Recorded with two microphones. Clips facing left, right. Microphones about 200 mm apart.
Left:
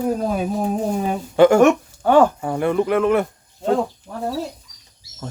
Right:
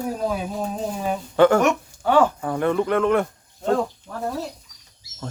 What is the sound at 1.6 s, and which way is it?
Speech, 45° left (ahead or behind).